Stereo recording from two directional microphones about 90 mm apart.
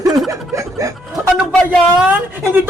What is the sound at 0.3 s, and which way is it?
Chuckle, 35° right (ahead or behind).